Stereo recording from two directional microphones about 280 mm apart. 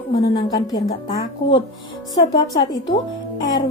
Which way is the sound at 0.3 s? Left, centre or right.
Centre.